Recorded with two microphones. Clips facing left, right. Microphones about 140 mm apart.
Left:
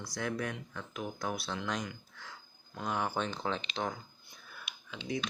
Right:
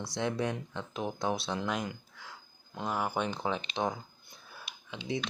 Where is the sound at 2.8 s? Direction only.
5° right (ahead or behind).